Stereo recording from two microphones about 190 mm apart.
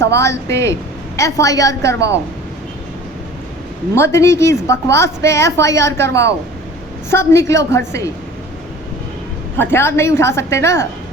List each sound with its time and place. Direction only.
0.0 s a woman's voice: 15° left (ahead or behind)
3.9 s a woman's voice: 15° left (ahead or behind)
9.6 s a woman's voice: 10° left (ahead or behind)